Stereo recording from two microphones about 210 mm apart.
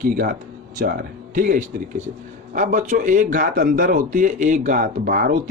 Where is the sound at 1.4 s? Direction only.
40° right (ahead or behind).